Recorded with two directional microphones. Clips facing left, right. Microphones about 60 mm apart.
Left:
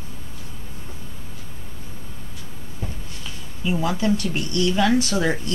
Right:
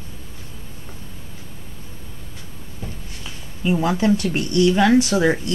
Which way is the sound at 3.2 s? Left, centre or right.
Right.